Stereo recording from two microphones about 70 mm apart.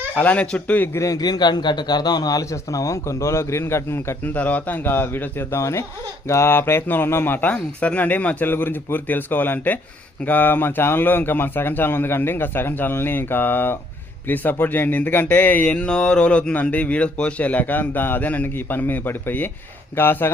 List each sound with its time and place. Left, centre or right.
0.2 s speech: centre
0.9 s a man's voice: left
2.4 s a man's voice: left
4.2 s speech: left